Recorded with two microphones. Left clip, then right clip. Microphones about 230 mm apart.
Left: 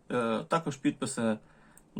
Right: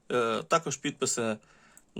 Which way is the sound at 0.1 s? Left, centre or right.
Right.